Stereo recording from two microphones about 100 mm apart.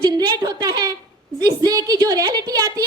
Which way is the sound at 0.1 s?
40° right (ahead or behind).